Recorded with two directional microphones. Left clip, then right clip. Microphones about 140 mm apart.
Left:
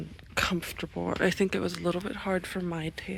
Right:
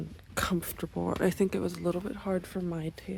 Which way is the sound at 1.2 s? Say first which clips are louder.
Left 2 dB; 25° right (ahead or behind).